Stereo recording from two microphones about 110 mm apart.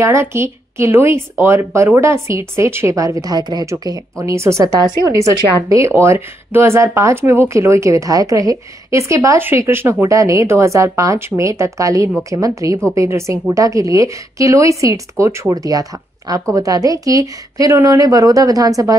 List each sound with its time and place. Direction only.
0.0 s a woman's voice: 25° right (ahead or behind)